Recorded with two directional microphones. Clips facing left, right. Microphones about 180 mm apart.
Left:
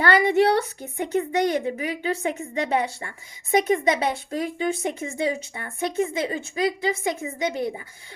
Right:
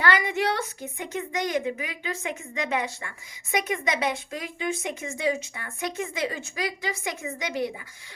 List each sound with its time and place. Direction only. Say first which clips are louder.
0.0 s a woman's voice: left 6 dB; 35° left (ahead or behind)